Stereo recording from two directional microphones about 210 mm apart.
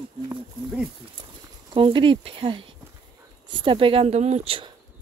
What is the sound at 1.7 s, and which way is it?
Speech, 25° right (ahead or behind).